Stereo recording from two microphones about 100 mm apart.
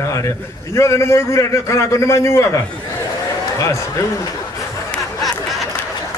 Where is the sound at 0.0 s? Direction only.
30° left (ahead or behind).